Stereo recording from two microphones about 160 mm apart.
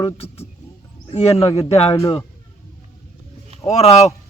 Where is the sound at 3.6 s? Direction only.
40° left (ahead or behind).